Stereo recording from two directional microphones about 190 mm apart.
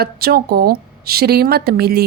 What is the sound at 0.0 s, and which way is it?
A woman's voice, 55° right (ahead or behind).